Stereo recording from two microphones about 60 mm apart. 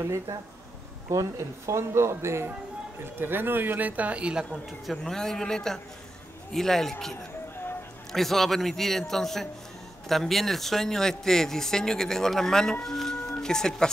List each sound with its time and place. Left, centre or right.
0.0 s speech: right
3.0 s a man's voice: right; by 4.5 s centre
4.5 s a man's voice: centre